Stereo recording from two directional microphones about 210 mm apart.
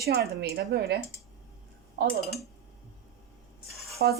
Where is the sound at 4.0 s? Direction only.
50° right (ahead or behind).